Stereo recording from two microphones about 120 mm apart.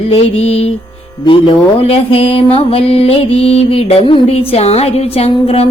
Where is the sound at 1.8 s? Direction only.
55° left (ahead or behind).